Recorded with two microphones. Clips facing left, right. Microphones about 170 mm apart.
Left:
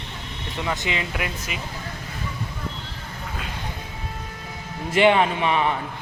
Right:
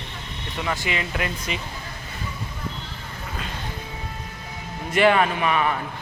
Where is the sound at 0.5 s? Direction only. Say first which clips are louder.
Even; 20° left (ahead or behind).